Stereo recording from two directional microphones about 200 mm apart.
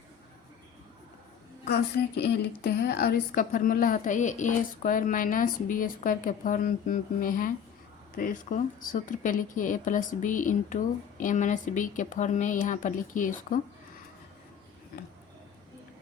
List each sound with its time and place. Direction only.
1.6 s a woman's voice: 55° left (ahead or behind)